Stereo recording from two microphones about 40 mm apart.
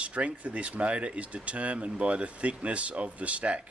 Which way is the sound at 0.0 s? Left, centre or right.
Right.